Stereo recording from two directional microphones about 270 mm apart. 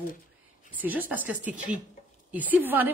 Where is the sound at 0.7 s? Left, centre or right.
Centre.